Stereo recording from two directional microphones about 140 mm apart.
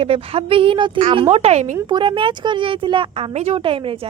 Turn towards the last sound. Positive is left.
turn(degrees=-40)  # may be behind; listen again after turning